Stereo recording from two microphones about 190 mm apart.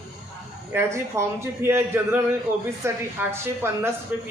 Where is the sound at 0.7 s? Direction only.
15° right (ahead or behind).